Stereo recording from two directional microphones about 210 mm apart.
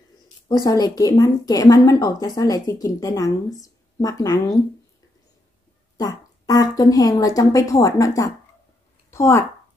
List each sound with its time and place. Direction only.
0.5 s a woman's voice: 20° left (ahead or behind)
5.9 s a woman's voice: 15° left (ahead or behind)